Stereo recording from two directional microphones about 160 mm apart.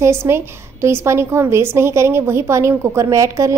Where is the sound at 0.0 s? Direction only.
15° right (ahead or behind).